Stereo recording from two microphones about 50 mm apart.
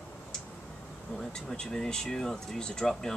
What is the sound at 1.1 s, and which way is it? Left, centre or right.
Speech, centre.